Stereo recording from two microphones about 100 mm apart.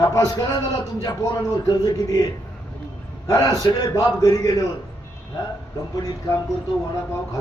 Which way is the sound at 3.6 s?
40° left (ahead or behind).